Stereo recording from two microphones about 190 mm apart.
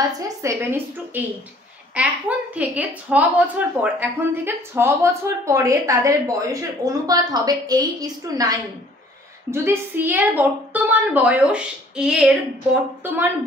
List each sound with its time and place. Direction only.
0.4 s a woman's voice: 15° right (ahead or behind)